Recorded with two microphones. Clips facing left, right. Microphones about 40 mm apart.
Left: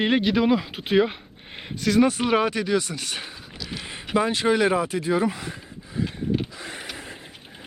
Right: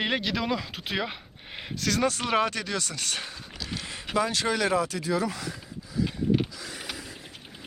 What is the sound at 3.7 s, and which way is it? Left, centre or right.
Mechanisms, left.